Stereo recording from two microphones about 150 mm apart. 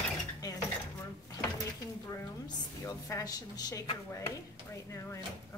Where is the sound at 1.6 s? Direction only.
20° left (ahead or behind).